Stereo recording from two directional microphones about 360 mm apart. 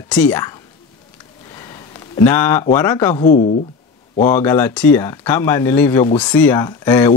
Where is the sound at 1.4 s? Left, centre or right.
Centre.